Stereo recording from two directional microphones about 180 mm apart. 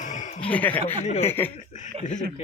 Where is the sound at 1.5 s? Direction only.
40° left (ahead or behind).